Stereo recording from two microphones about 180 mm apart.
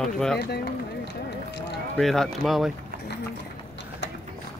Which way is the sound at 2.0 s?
Centre (ahead or behind).